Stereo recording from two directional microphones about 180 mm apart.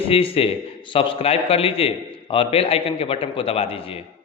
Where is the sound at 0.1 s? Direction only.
30° left (ahead or behind).